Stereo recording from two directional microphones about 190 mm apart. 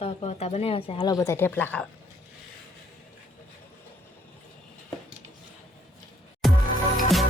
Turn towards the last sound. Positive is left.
turn(degrees=0)  # may be behind; listen again after turning